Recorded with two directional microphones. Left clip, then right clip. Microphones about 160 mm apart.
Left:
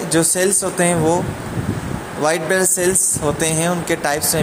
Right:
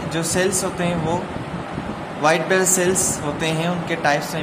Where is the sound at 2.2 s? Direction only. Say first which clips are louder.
Even; 50° left (ahead or behind).